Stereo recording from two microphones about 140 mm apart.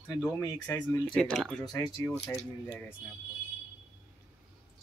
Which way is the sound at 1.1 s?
5° left (ahead or behind).